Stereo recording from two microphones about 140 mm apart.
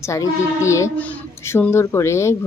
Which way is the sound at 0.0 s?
20° left (ahead or behind).